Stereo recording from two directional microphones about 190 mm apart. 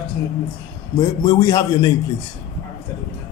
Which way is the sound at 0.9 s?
15° left (ahead or behind).